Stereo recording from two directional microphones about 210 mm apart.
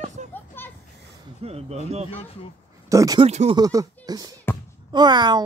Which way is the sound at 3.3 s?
30° right (ahead or behind).